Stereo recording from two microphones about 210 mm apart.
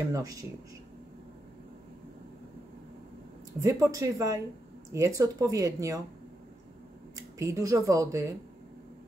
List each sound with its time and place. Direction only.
0.1 s speech: 15° right (ahead or behind)
3.6 s speech: 15° right (ahead or behind)
7.3 s speech: 15° right (ahead or behind)